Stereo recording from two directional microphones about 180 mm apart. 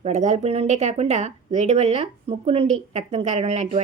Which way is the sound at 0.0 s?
40° right (ahead or behind).